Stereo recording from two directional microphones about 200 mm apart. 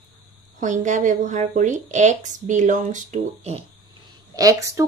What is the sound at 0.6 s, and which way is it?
Speech, 40° right (ahead or behind).